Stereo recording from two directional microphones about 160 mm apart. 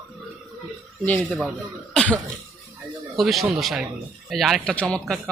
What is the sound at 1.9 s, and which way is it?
Throat clearing, 10° left (ahead or behind).